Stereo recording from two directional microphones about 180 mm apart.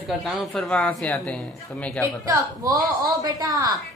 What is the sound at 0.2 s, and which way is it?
Speech, centre (ahead or behind).